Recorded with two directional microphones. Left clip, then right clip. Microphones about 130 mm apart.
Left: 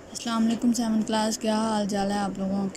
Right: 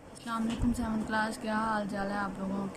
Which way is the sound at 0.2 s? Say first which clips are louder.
Left 7 dB; 20° left (ahead or behind).